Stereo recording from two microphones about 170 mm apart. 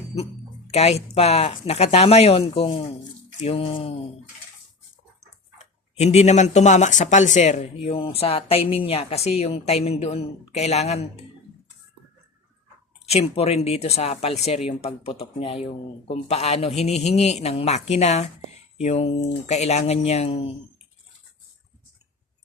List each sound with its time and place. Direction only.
0.1 s speech: 35° left (ahead or behind)
6.0 s speech: 40° left (ahead or behind)
13.1 s speech: 35° left (ahead or behind)